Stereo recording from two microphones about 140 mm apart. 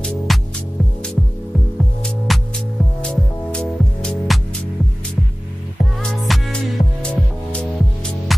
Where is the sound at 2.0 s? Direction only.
Centre (ahead or behind).